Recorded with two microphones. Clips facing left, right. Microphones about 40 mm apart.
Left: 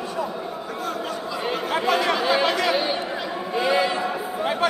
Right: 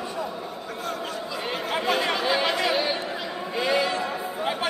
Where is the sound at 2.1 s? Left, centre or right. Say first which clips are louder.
Left 3 dB; centre.